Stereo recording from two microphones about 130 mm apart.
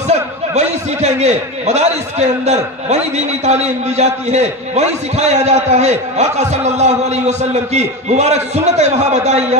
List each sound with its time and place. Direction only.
0.1 s a man's voice: 60° right (ahead or behind)